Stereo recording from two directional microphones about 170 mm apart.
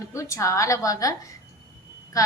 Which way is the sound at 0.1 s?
20° left (ahead or behind).